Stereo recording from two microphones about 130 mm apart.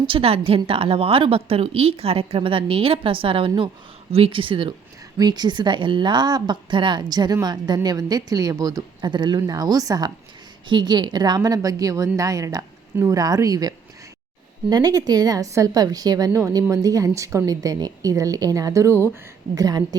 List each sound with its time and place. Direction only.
0.0 s a woman's voice: 45° right (ahead or behind); by 20.0 s 30° right (ahead or behind)